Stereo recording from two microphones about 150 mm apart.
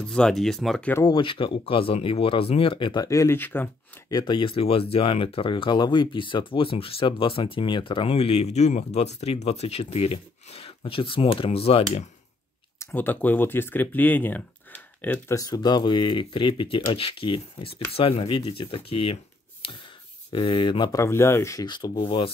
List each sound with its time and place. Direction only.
0.0 s speech: 5° left (ahead or behind)
0.9 s speech: 30° left (ahead or behind); by 3.7 s 15° left (ahead or behind)
4.1 s speech: 30° left (ahead or behind)
12.7 s speech: 10° left (ahead or behind)
15.3 s speech: 25° left (ahead or behind)
20.3 s speech: 35° left (ahead or behind)